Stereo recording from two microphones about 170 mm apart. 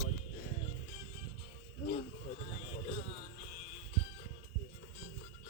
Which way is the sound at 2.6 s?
35° left (ahead or behind).